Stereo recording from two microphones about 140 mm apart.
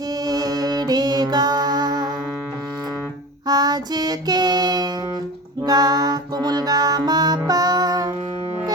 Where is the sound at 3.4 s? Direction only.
30° right (ahead or behind).